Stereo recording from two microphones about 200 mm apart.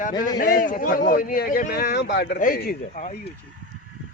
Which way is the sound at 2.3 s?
45° left (ahead or behind).